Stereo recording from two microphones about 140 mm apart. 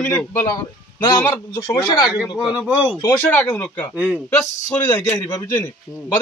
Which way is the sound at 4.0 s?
10° right (ahead or behind).